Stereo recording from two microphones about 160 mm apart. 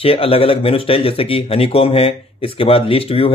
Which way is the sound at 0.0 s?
35° left (ahead or behind).